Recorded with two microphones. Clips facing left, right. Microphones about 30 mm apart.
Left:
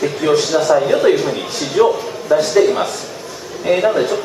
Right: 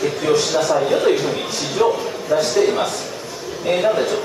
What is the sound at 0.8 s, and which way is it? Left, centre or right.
A man's voice, centre.